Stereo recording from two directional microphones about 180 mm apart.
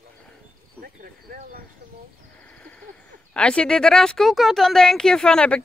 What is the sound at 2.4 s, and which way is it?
Speech, 10° left (ahead or behind).